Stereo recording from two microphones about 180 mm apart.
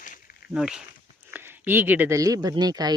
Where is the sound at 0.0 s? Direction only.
50° left (ahead or behind).